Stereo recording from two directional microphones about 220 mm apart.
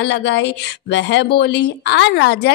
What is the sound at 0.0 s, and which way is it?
A woman's voice, 55° left (ahead or behind).